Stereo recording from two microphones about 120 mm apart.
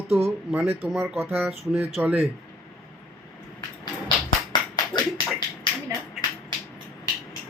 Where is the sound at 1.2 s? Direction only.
20° right (ahead or behind).